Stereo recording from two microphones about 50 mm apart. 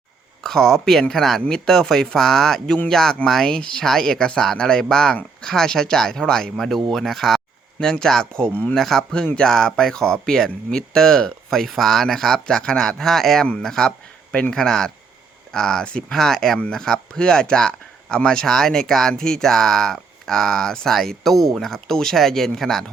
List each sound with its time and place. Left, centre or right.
0.4 s speech: centre